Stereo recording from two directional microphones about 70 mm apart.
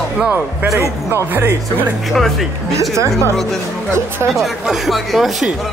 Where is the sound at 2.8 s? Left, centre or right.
Right.